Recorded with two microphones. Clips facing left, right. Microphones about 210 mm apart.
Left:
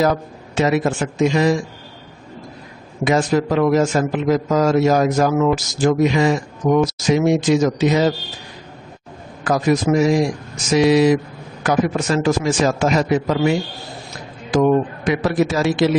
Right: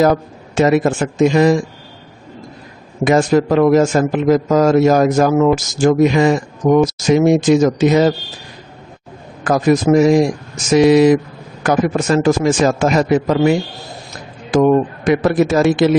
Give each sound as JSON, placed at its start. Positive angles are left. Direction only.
{"t": 0.0, "sound": "a man's voice", "side_deg": -50}
{"t": 3.0, "sound": "a man's voice", "side_deg": -50}
{"t": 9.4, "sound": "a man's voice", "side_deg": -50}